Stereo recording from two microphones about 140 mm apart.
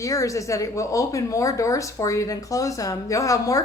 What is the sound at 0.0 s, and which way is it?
Speech, 25° left (ahead or behind).